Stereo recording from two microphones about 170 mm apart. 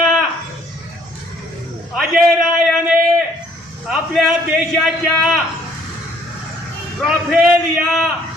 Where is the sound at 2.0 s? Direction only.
Centre (ahead or behind).